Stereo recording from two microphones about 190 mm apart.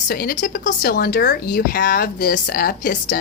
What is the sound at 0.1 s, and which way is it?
A woman's voice, 50° left (ahead or behind).